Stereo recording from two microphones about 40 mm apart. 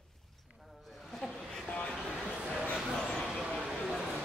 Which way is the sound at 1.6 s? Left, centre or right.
Left.